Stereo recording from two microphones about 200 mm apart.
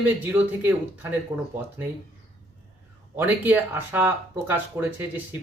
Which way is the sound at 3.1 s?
10° right (ahead or behind).